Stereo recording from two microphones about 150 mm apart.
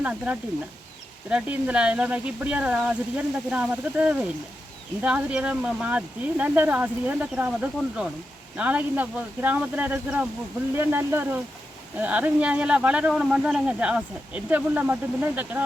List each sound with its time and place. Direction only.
0.0 s speech: 10° right (ahead or behind)